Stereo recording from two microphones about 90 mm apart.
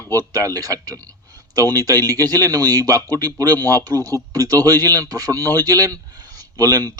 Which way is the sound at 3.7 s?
40° right (ahead or behind).